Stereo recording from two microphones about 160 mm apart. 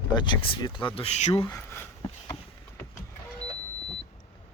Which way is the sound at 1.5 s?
15° left (ahead or behind).